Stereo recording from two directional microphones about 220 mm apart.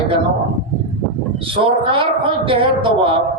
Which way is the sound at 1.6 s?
25° right (ahead or behind).